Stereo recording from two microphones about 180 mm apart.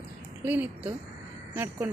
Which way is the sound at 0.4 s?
10° right (ahead or behind).